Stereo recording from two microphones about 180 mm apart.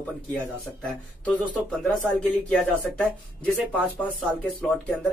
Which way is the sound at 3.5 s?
10° right (ahead or behind).